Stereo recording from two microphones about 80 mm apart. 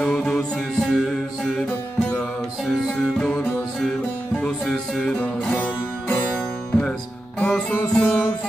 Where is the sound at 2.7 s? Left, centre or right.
Centre.